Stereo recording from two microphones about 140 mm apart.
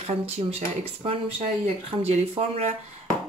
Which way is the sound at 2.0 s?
50° right (ahead or behind).